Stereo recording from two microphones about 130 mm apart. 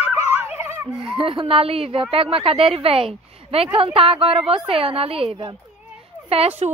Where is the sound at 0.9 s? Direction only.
40° right (ahead or behind).